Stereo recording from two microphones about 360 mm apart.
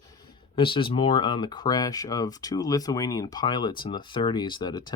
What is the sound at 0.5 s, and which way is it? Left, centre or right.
Speech, centre.